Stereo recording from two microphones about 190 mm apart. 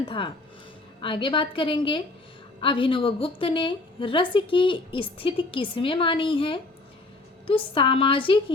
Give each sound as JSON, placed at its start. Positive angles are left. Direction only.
{"t": 1.0, "sound": "a woman's voice", "side_deg": 25}